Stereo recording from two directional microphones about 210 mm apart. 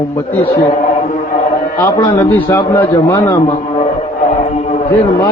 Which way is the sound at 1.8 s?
15° left (ahead or behind).